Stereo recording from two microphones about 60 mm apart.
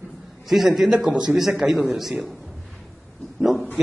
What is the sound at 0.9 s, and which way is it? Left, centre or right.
Speech, centre.